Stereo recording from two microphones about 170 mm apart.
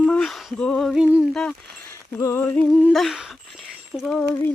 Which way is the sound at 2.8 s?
5° right (ahead or behind).